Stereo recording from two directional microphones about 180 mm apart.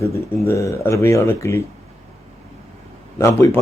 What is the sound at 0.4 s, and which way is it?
Speech, 15° left (ahead or behind).